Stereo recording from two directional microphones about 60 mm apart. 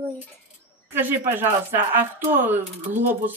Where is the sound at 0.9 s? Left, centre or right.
Right.